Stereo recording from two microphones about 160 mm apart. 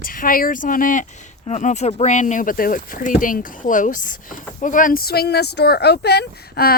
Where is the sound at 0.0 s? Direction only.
60° left (ahead or behind).